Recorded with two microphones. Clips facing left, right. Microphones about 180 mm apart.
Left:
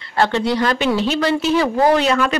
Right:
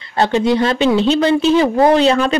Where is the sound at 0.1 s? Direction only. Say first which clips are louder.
Right 3 dB; 20° right (ahead or behind).